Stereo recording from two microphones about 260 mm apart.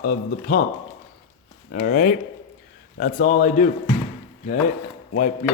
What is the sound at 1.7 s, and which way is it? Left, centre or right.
Dishes, left.